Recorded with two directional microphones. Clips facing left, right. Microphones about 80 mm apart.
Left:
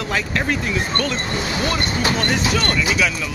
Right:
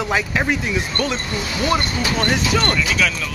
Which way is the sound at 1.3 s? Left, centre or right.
Left.